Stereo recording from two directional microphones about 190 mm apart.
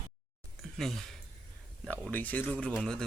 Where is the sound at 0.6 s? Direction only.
Centre (ahead or behind).